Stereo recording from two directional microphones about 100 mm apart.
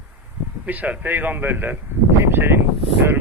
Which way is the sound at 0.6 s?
15° right (ahead or behind).